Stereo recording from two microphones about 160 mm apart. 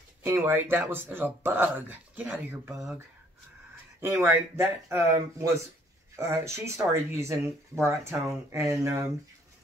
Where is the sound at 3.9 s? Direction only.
15° right (ahead or behind).